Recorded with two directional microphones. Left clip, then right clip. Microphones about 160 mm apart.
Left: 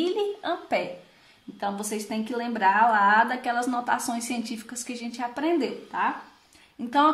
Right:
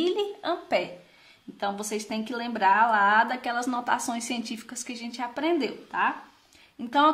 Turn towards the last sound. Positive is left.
turn(degrees=-10)  # may be behind; listen again after turning